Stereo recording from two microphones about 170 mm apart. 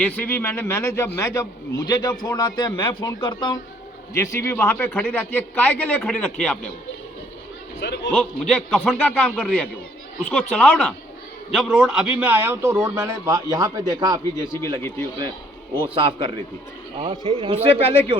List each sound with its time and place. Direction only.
0.0 s a man's voice: 10° left (ahead or behind); by 3.6 s 25° left (ahead or behind)
4.1 s a man's voice: 15° left (ahead or behind)
7.8 s a man's voice: 90° left
8.1 s a man's voice: 5° left (ahead or behind)
11.7 s a man's voice: 5° right (ahead or behind); by 14.2 s 25° right (ahead or behind)
14.8 s a man's voice: 15° left (ahead or behind)
15.8 s a man's voice: 30° right (ahead or behind)